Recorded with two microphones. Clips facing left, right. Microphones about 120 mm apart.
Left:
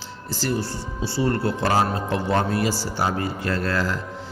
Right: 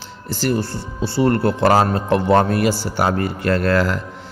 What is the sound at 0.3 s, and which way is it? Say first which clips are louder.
Speech: right 5 dB; 60° right (ahead or behind).